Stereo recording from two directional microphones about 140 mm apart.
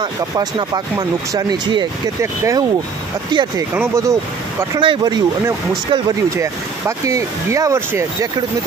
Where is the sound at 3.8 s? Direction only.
20° right (ahead or behind).